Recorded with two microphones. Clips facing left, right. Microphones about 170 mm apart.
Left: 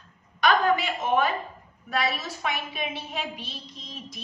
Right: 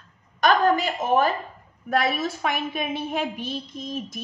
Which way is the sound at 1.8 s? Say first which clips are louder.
Right 5 dB; 50° right (ahead or behind).